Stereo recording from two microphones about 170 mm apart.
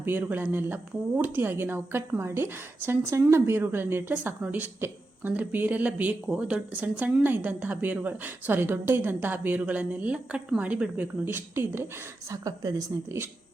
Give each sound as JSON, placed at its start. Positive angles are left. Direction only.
{"t": 0.0, "sound": "a woman's voice", "side_deg": -10}